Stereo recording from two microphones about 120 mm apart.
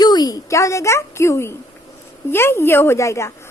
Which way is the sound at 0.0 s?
35° left (ahead or behind).